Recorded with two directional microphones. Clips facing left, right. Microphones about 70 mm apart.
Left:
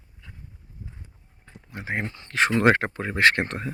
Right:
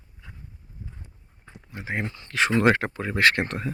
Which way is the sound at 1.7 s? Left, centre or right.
Left.